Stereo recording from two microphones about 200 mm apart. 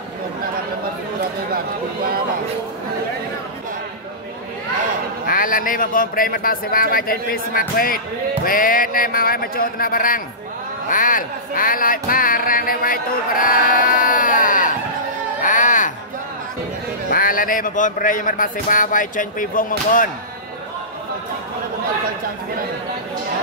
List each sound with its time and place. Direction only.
5.2 s a man's voice: 45° left (ahead or behind)
15.4 s music: 40° left (ahead or behind)
17.1 s a man's voice: 45° left (ahead or behind)